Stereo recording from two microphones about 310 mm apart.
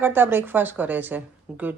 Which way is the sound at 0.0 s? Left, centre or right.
Centre.